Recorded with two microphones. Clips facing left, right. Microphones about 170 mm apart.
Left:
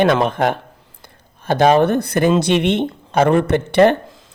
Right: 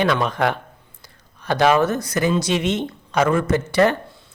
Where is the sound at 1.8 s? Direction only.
60° left (ahead or behind).